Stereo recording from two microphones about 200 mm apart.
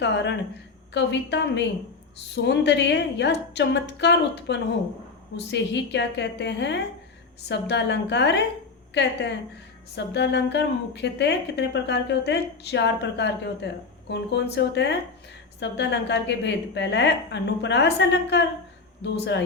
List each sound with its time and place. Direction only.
0.0 s a woman's voice: 60° left (ahead or behind)